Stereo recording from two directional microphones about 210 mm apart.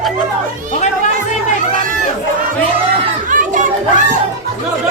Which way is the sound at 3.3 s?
35° right (ahead or behind).